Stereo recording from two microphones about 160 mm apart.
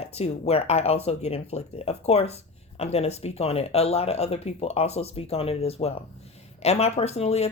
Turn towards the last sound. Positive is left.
turn(degrees=40)  # may be behind; listen again after turning